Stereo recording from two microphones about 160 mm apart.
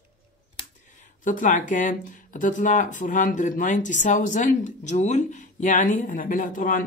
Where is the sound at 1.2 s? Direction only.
55° left (ahead or behind).